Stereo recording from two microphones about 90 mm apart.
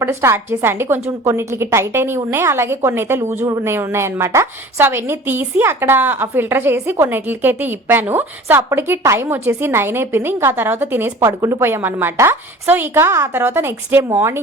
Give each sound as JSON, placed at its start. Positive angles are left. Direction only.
{"t": 0.0, "sound": "a woman's voice", "side_deg": -30}
{"t": 11.2, "sound": "a woman's voice", "side_deg": -35}